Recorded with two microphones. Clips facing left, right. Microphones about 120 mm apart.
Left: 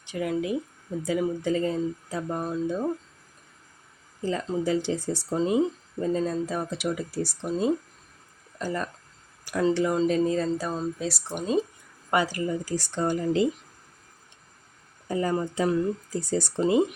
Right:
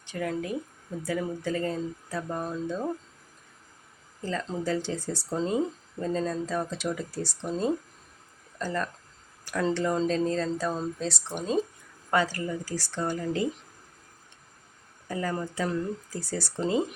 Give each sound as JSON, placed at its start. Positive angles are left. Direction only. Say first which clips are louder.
{"t": 0.0, "sound": "speech", "louder": "left 3 dB", "side_deg": 15}
{"t": 4.2, "sound": "speech", "louder": "left 4 dB", "side_deg": 15}
{"t": 15.0, "sound": "speech", "louder": "left 5 dB", "side_deg": 20}